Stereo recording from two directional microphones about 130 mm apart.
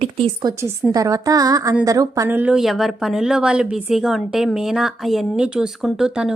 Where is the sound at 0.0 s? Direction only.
45° right (ahead or behind).